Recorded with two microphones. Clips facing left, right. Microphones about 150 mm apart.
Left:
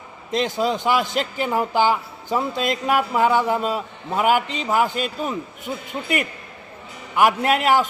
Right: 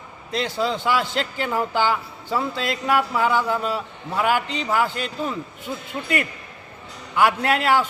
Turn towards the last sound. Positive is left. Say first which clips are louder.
# left 2 dB
turn(degrees=15)  # may be behind; listen again after turning